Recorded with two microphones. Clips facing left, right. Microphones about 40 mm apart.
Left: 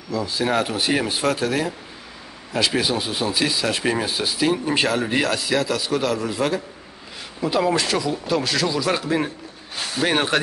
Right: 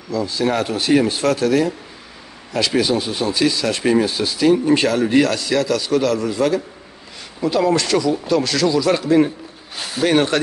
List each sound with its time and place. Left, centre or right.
0.1 s a man's voice: centre
10.0 s speech: centre